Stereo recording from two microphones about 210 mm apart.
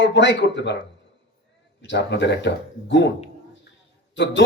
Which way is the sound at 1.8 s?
55° left (ahead or behind).